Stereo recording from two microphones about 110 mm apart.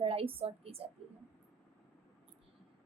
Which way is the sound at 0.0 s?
60° right (ahead or behind).